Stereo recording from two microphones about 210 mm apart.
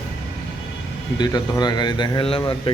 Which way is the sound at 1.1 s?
20° left (ahead or behind).